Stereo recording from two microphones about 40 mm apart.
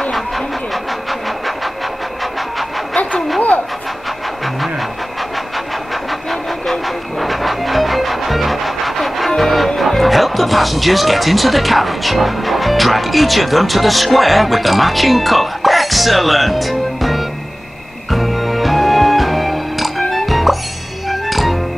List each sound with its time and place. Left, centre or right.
3.0 s a sound: left
6.7 s music: centre
9.8 s speech: centre
18.1 s music: centre